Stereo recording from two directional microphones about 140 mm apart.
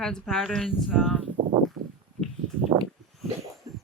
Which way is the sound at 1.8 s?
90° right.